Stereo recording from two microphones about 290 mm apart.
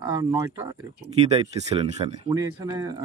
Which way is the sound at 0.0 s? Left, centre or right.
Centre.